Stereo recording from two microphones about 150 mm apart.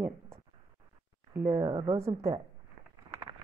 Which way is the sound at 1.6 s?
30° right (ahead or behind).